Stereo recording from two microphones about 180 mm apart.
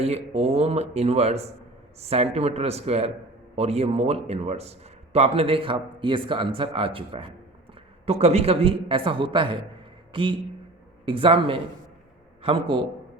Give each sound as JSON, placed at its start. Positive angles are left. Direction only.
{"t": 0.0, "sound": "a man's voice", "side_deg": -35}